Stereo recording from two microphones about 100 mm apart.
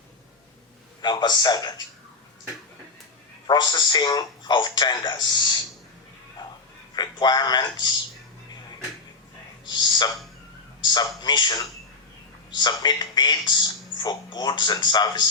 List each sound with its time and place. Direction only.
1.1 s speech: 45° left (ahead or behind)
3.4 s speech: 45° left (ahead or behind)
6.9 s speech: 45° left (ahead or behind)
9.7 s speech: 45° left (ahead or behind)